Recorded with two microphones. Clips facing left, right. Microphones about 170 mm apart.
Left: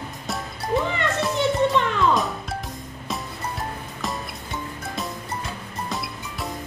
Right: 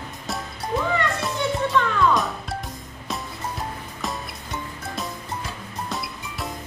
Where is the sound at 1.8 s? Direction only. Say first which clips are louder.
Right 1 dB; 20° left (ahead or behind).